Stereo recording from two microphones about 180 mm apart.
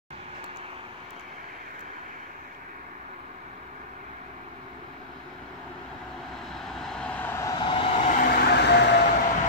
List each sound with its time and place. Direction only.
6.5 s vehicle: centre (ahead or behind); by 8.3 s 40° left (ahead or behind)
8.3 s vehicle: 65° left (ahead or behind)